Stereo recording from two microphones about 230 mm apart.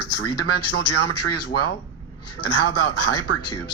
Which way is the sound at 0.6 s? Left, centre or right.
Left.